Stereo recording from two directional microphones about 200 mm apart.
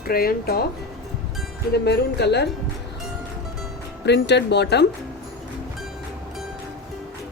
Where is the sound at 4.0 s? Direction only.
60° left (ahead or behind).